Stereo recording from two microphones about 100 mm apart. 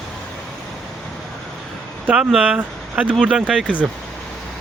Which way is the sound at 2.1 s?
10° right (ahead or behind).